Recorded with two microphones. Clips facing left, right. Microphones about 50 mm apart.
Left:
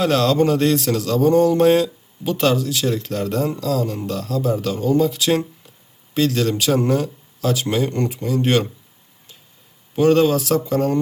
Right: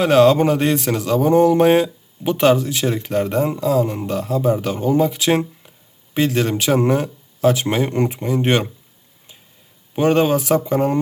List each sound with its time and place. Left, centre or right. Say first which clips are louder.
0.0 s speech: right 4 dB; right
9.9 s speech: left 1 dB; right